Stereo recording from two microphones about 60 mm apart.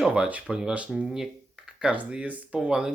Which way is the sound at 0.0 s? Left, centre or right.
Centre.